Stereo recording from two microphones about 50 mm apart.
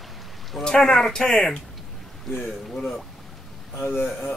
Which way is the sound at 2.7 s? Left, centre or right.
Centre.